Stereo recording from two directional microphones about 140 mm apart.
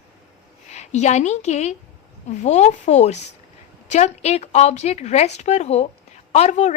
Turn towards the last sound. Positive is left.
turn(degrees=55)  # may be behind; listen again after turning